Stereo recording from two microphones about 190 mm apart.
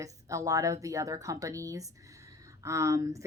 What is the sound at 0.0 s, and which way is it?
A woman's voice, 15° right (ahead or behind).